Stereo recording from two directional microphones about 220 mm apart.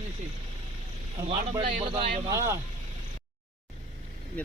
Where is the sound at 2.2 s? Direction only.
15° right (ahead or behind).